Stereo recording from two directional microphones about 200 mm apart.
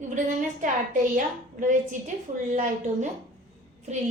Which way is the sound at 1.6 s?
40° right (ahead or behind).